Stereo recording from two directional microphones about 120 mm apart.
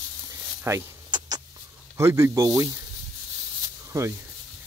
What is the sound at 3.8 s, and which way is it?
Snake, 25° right (ahead or behind).